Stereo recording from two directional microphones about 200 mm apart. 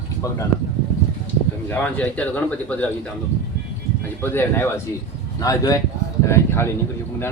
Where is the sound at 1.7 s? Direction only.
5° left (ahead or behind).